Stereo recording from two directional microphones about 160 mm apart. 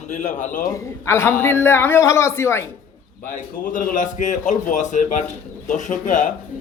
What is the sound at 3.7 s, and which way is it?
Speech, 55° left (ahead or behind).